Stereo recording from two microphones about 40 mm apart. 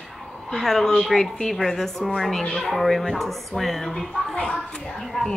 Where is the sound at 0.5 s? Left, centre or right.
Centre.